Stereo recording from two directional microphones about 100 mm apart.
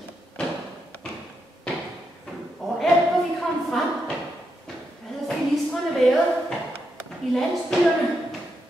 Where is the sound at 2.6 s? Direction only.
Centre (ahead or behind).